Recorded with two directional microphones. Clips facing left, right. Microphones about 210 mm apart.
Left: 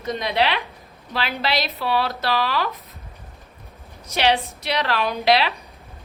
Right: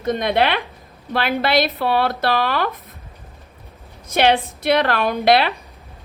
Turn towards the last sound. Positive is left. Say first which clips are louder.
# right 3 dB
turn(degrees=-50)  # may be behind; listen again after turning